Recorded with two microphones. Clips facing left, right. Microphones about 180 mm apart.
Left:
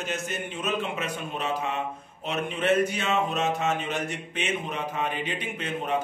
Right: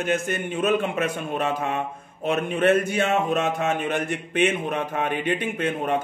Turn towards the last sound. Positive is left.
turn(degrees=-50)  # may be behind; listen again after turning